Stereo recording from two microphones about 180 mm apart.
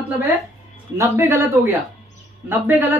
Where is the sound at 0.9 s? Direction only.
15° right (ahead or behind).